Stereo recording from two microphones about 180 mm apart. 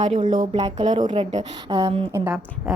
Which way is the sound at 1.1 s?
30° right (ahead or behind).